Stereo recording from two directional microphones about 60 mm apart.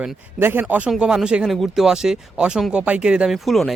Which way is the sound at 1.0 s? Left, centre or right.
Centre.